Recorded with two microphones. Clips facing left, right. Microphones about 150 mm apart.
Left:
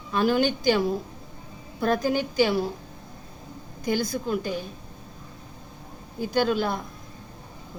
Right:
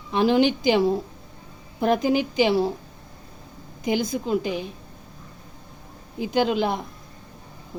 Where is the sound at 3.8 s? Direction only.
20° right (ahead or behind).